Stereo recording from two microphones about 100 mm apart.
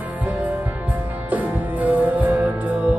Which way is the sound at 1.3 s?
15° right (ahead or behind).